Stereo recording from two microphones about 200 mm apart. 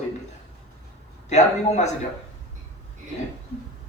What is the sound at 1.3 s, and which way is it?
Speech, 35° left (ahead or behind).